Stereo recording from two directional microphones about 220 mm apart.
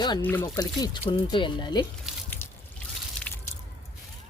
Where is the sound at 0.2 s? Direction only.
10° left (ahead or behind).